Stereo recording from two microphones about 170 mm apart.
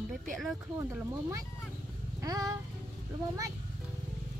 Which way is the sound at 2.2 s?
20° right (ahead or behind).